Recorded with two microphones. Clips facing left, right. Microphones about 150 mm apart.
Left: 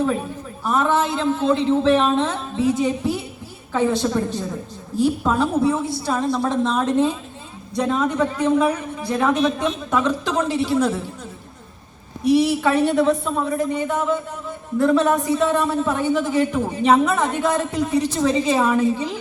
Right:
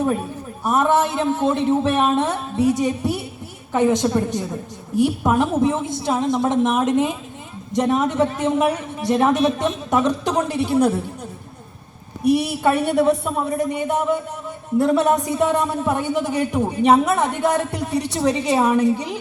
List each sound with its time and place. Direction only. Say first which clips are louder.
0.6 s a man's voice: right 2 dB; 15° right (ahead or behind)
12.4 s a man's voice: left 2 dB; 10° right (ahead or behind)